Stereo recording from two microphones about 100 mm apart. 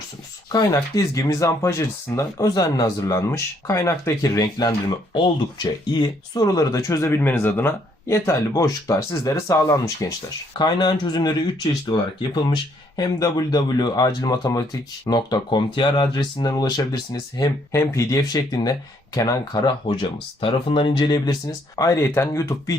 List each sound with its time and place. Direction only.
0.5 s speech: 35° left (ahead or behind)
8.0 s speech: 30° left (ahead or behind)
10.6 s speech: 45° left (ahead or behind)
17.7 s speech: 30° left (ahead or behind)
22.0 s speech: 25° left (ahead or behind)